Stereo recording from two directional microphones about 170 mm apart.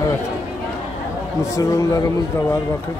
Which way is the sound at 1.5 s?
20° left (ahead or behind).